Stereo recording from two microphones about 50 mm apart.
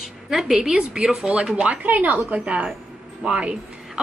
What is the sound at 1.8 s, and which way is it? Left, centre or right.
A woman's voice, right.